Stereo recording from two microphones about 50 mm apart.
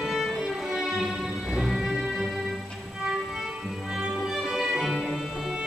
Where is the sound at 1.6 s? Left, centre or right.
Centre.